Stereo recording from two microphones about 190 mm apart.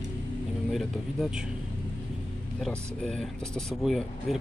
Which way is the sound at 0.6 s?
Centre (ahead or behind).